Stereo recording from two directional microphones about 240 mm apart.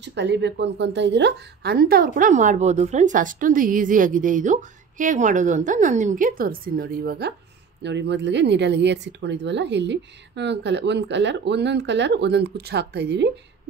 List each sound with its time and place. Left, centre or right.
0.0 s a woman's voice: right